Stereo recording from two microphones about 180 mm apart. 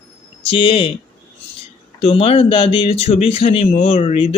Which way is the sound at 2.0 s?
30° left (ahead or behind).